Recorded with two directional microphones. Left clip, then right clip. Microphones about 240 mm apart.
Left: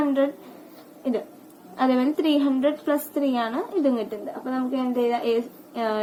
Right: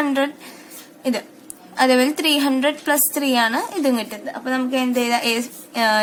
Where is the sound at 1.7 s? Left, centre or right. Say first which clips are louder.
Right 6 dB; right.